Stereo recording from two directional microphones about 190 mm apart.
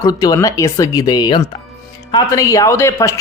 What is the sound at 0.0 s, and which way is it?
Speech, 20° left (ahead or behind).